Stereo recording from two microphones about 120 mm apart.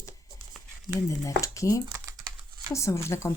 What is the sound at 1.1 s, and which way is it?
A woman's voice, 25° left (ahead or behind).